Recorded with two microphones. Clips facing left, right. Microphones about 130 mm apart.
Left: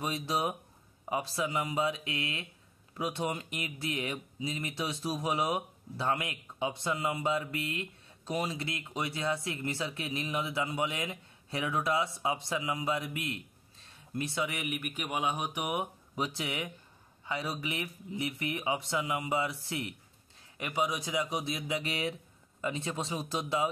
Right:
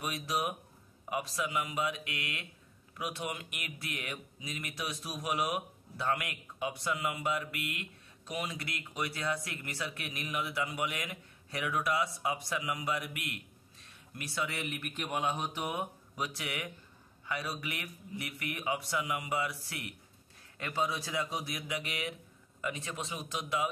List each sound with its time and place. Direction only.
0.0 s speech: 30° left (ahead or behind)